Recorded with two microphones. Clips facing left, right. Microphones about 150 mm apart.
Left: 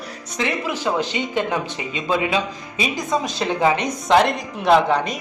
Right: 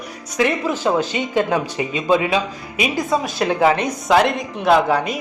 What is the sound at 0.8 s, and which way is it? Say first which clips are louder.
Speech: right 3 dB; 20° left (ahead or behind).